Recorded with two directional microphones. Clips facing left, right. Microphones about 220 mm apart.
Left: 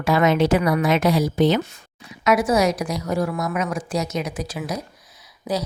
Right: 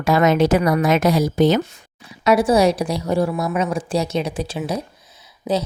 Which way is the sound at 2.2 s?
30° right (ahead or behind).